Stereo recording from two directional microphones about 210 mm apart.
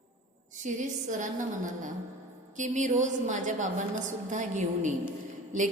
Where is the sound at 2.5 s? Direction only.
35° right (ahead or behind).